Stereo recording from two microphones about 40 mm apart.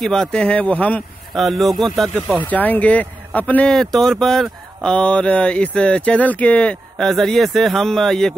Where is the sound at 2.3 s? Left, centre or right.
Left.